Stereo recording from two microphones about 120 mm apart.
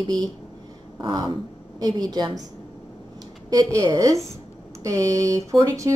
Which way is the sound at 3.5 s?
30° right (ahead or behind).